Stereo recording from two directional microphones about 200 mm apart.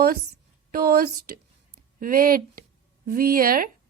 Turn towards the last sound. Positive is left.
turn(degrees=-45)  # may be behind; listen again after turning